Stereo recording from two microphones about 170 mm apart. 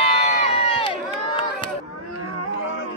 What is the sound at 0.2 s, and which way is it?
Crowd, 40° left (ahead or behind).